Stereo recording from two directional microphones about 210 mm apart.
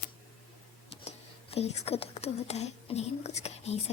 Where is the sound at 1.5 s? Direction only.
30° left (ahead or behind).